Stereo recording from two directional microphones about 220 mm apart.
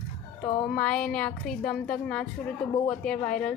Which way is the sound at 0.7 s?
5° left (ahead or behind).